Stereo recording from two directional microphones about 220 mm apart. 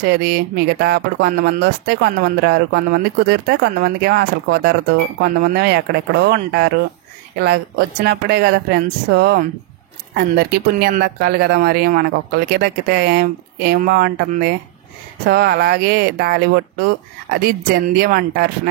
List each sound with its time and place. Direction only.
0.1 s speech: 45° right (ahead or behind)